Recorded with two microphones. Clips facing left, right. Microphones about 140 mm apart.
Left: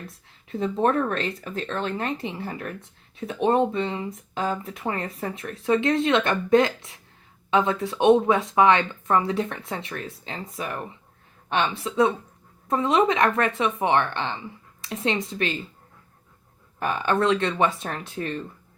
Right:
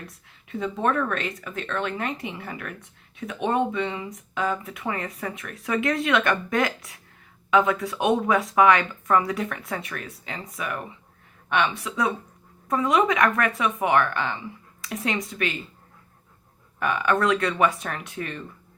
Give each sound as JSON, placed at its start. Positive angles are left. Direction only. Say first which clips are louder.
{"t": 0.4, "sound": "speech", "louder": "left 3 dB", "side_deg": 35}
{"t": 16.8, "sound": "speech", "louder": "even", "side_deg": 30}